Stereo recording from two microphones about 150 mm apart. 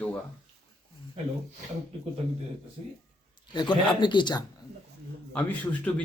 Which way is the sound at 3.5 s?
30° left (ahead or behind).